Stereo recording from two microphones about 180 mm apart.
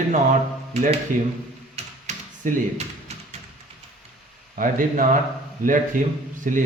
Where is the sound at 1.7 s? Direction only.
40° right (ahead or behind).